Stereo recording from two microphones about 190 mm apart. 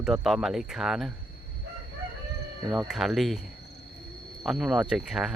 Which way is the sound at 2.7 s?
5° right (ahead or behind).